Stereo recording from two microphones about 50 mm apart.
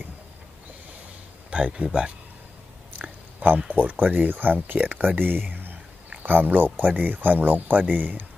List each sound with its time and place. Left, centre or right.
1.5 s speech: right